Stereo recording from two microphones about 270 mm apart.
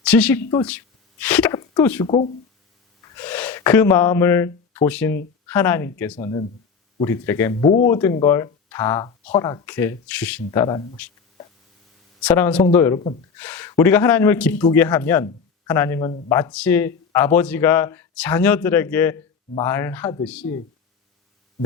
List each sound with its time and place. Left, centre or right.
0.0 s a woman's voice: centre
1.2 s a sound: centre
2.0 s speech: left
3.2 s gasp: centre
4.9 s speech: centre
12.2 s speech: centre